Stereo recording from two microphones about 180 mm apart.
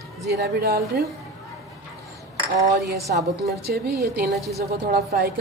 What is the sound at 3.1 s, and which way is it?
A woman's voice, 55° right (ahead or behind).